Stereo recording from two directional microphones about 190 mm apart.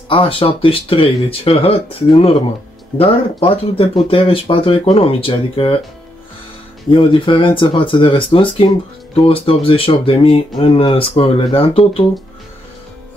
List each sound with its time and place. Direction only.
0.1 s speech: 30° left (ahead or behind)
6.9 s speech: 25° left (ahead or behind)